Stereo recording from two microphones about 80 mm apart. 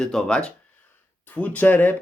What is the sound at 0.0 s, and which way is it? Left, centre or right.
Speech, centre.